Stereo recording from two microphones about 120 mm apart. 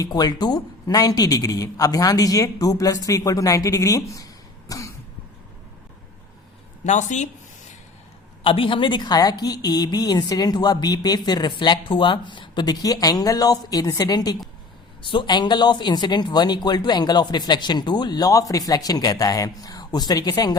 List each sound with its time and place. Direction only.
0.0 s a woman's voice: 30° left (ahead or behind)
4.7 s cough: 30° left (ahead or behind)
6.8 s speech: 80° left
8.4 s a woman's voice: 45° left (ahead or behind)